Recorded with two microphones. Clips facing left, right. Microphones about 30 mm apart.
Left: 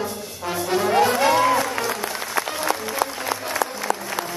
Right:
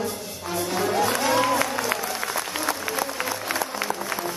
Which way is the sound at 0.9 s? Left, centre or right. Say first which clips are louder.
Left 5 dB; left.